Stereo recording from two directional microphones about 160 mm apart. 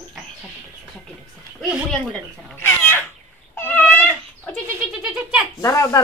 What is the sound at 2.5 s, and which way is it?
Cat, 10° left (ahead or behind).